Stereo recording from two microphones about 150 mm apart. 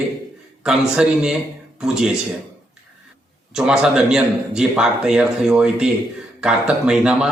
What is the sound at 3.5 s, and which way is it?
A man's voice, 5° right (ahead or behind).